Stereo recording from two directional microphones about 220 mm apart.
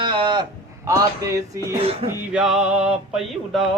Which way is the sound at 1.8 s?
25° right (ahead or behind).